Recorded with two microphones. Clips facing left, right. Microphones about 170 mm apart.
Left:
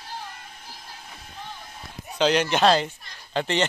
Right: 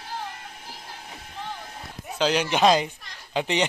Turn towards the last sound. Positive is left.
turn(degrees=-10)  # may be behind; listen again after turning